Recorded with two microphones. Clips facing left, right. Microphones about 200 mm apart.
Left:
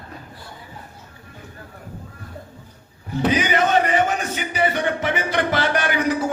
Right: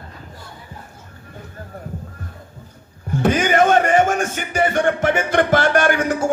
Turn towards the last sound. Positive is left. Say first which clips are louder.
# right 4 dB
turn(degrees=-50)  # may be behind; listen again after turning